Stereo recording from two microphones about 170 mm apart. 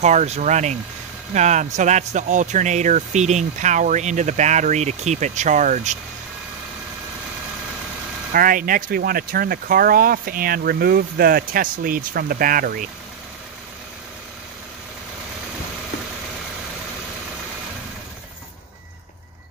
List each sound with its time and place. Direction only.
0.0 s speech: 45° right (ahead or behind)
8.3 s speech: 55° right (ahead or behind)